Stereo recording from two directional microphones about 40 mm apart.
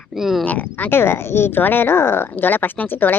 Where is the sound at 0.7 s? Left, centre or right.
Left.